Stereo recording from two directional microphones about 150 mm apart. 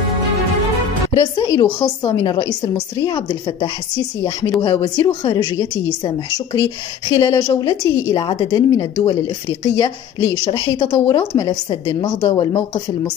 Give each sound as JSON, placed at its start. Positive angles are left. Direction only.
{"t": 1.2, "sound": "a woman's voice", "side_deg": 30}